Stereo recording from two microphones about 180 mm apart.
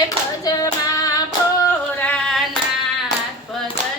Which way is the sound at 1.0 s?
20° left (ahead or behind).